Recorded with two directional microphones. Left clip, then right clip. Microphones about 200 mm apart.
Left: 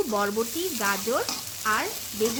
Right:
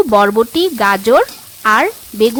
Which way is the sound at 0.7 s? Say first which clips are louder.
Right 16 dB; 50° right (ahead or behind).